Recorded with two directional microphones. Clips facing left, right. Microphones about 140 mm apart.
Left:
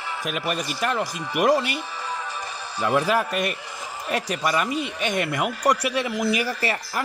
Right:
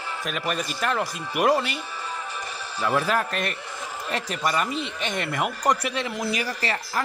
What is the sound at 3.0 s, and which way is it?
Speech, 10° left (ahead or behind).